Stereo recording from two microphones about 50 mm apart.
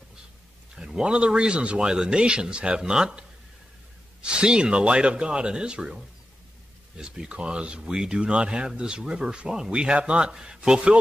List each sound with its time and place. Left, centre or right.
0.7 s speech: centre